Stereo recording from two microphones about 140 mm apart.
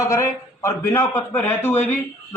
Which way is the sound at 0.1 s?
20° left (ahead or behind).